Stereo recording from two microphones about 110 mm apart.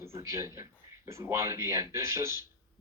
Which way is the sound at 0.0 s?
25° right (ahead or behind).